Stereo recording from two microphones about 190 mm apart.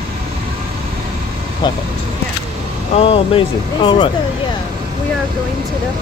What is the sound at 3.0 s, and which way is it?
Speech, 30° left (ahead or behind).